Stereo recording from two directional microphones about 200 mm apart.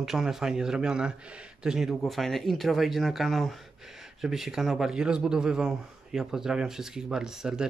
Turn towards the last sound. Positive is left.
turn(degrees=-5)  # may be behind; listen again after turning